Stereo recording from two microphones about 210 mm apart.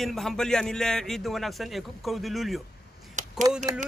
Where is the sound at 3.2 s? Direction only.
35° right (ahead or behind).